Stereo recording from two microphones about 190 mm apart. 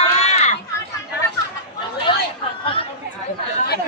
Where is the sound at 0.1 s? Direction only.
35° left (ahead or behind).